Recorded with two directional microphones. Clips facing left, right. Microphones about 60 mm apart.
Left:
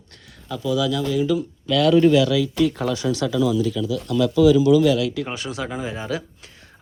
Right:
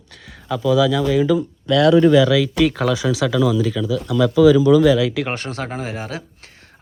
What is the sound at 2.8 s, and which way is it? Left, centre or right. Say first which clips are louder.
Speech: right 4 dB; right.